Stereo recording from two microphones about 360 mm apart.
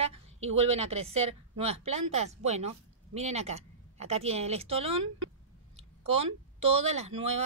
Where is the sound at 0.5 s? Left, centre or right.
Centre.